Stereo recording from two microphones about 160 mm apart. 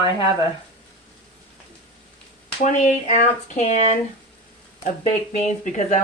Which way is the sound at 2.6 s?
50° left (ahead or behind).